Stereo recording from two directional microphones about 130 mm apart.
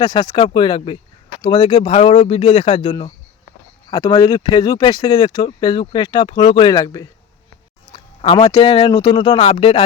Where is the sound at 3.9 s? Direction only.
30° left (ahead or behind).